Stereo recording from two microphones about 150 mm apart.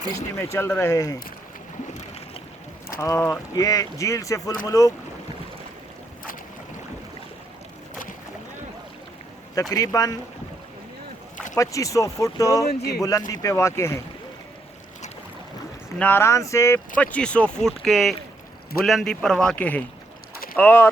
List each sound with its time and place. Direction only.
0.3 s speech: 20° left (ahead or behind)
3.0 s speech: 15° left (ahead or behind)
9.6 s speech: 25° left (ahead or behind)
11.5 s speech: 20° left (ahead or behind)
16.0 s speech: 15° left (ahead or behind)
17.0 s speech: 10° left (ahead or behind)